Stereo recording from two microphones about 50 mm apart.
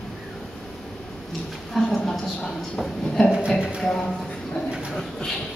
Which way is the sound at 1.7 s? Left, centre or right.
Centre.